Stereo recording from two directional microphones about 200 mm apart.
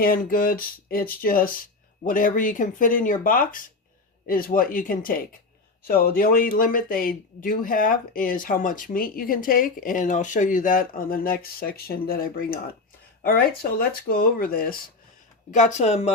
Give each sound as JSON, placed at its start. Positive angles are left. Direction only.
{"t": 0.0, "sound": "speech", "side_deg": 45}